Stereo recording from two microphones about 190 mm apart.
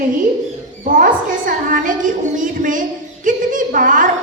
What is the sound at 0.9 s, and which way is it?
A woman's voice, 45° right (ahead or behind).